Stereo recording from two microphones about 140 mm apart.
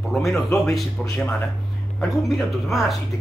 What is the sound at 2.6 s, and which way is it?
Speech, centre (ahead or behind).